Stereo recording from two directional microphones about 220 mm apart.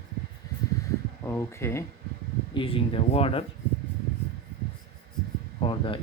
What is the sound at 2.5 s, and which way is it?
Speech, 25° left (ahead or behind).